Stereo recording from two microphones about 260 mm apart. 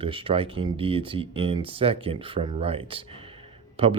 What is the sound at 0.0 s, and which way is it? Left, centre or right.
Speech, centre.